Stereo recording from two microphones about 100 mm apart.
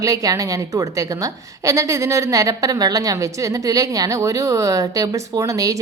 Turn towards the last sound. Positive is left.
turn(degrees=-35)  # may be behind; listen again after turning